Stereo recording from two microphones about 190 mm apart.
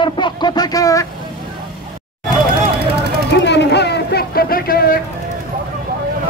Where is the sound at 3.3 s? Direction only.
65° left (ahead or behind).